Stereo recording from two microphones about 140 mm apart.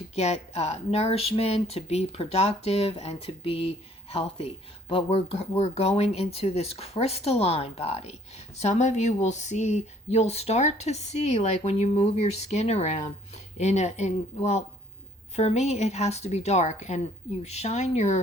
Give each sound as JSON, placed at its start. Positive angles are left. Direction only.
{"t": 0.2, "sound": "speech", "side_deg": 50}